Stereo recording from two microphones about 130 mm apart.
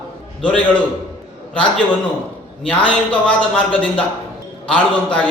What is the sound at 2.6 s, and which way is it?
A man's voice, 10° left (ahead or behind).